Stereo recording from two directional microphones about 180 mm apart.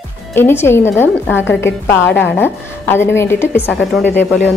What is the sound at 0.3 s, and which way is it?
A woman's voice, 15° left (ahead or behind).